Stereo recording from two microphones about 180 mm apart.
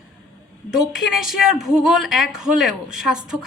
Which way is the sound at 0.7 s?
Centre (ahead or behind).